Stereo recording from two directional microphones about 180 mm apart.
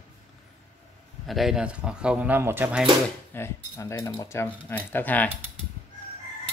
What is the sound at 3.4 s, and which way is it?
Speech, 15° left (ahead or behind).